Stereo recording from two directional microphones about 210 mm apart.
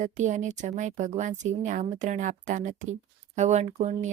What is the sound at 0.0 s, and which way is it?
Speech, 35° right (ahead or behind).